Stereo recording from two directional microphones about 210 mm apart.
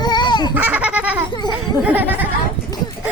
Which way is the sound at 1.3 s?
20° left (ahead or behind).